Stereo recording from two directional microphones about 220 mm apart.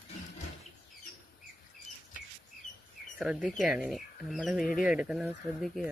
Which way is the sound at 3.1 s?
5° right (ahead or behind).